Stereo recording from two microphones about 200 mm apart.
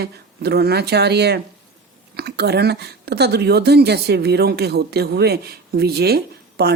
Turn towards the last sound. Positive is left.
turn(degrees=-55)  # may be behind; listen again after turning